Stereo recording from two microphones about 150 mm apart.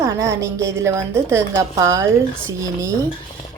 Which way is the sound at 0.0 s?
20° right (ahead or behind).